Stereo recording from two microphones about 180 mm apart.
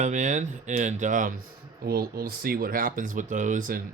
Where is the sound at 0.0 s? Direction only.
45° right (ahead or behind).